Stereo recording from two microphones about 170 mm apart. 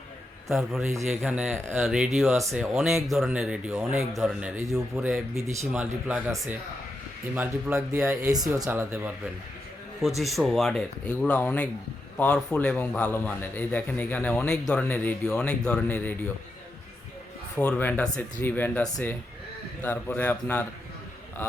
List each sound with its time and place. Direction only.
0.4 s speech: centre (ahead or behind)
5.3 s speech: 15° right (ahead or behind)
5.7 s speech: 5° right (ahead or behind)
7.3 s speech: 10° right (ahead or behind)
8.0 s speech: 15° right (ahead or behind)
10.2 s a man's voice: centre (ahead or behind)
17.6 s a man's voice: 10° left (ahead or behind)